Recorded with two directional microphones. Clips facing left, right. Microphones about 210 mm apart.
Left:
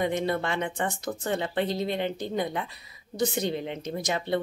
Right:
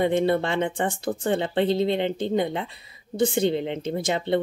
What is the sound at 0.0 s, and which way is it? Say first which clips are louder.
Speech: right 6 dB; 30° right (ahead or behind).